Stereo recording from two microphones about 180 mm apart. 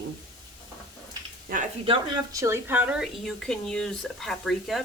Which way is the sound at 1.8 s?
25° right (ahead or behind).